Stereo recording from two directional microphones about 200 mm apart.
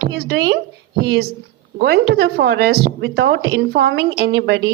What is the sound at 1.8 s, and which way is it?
A woman's voice, 55° right (ahead or behind).